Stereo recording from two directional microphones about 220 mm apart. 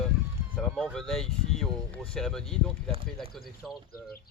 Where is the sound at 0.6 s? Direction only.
Centre (ahead or behind).